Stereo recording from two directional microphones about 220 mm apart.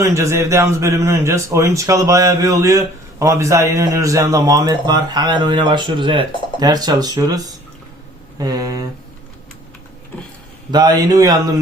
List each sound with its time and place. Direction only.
0.0 s a man's voice: 15° right (ahead or behind)
10.7 s a man's voice: 20° right (ahead or behind)